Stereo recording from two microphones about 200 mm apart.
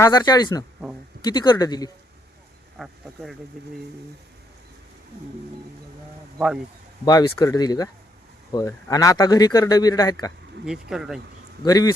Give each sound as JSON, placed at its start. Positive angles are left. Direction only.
{"t": 0.0, "sound": "speech", "side_deg": 20}
{"t": 2.7, "sound": "speech", "side_deg": 0}
{"t": 7.0, "sound": "speech", "side_deg": 20}
{"t": 10.7, "sound": "speech", "side_deg": 0}
{"t": 11.6, "sound": "speech", "side_deg": 20}